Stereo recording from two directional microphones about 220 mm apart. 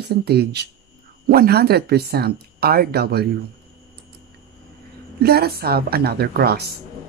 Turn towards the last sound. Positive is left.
turn(degrees=-45)  # may be behind; listen again after turning